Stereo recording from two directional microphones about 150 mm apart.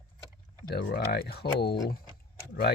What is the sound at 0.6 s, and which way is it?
Speech, 90° left.